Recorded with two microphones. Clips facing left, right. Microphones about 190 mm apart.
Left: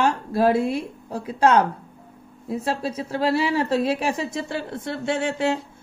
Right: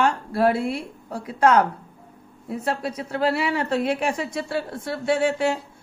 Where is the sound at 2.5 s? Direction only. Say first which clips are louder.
Left 1 dB; 30° left (ahead or behind).